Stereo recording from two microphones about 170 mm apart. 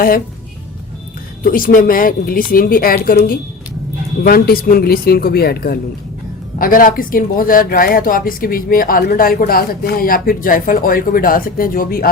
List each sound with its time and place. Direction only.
1.5 s speech: 55° left (ahead or behind)
4.2 s speech: 60° left (ahead or behind)